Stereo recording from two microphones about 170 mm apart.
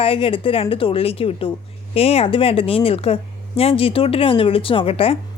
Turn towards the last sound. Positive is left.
turn(degrees=35)  # may be behind; listen again after turning